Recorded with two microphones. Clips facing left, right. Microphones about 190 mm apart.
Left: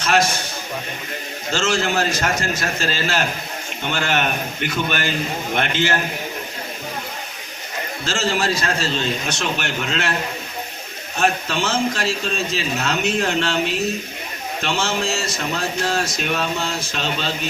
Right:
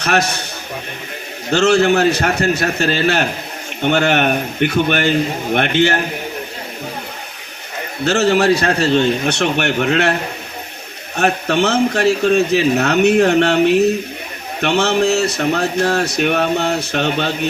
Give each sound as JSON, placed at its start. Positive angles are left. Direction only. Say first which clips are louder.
{"t": 0.0, "sound": "speech", "louder": "right 1 dB", "side_deg": -65}
{"t": 1.5, "sound": "speech", "louder": "right 9 dB", "side_deg": -60}
{"t": 8.0, "sound": "speech", "louder": "right 9 dB", "side_deg": -65}
{"t": 11.2, "sound": "speech", "louder": "right 5 dB", "side_deg": -65}